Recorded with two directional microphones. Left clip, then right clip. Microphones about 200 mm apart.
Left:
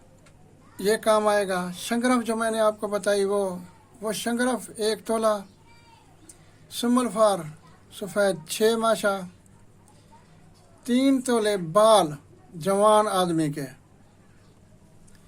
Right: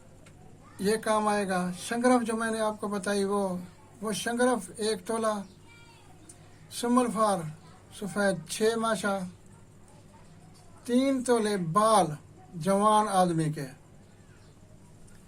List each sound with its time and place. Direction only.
0.8 s a man's voice: 45° left (ahead or behind)
6.7 s a man's voice: 45° left (ahead or behind)
10.8 s a man's voice: 40° left (ahead or behind)